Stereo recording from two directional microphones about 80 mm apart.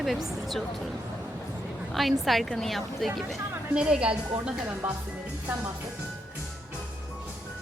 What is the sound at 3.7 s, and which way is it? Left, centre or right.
Speech, centre.